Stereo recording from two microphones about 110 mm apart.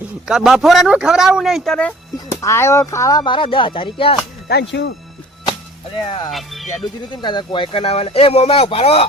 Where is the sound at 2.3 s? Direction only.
25° left (ahead or behind); by 4.2 s 55° left (ahead or behind).